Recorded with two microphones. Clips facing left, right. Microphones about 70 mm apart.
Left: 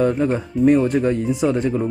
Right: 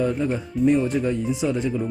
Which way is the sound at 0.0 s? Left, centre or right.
Left.